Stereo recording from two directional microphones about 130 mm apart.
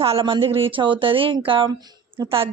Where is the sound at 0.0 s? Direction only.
45° right (ahead or behind).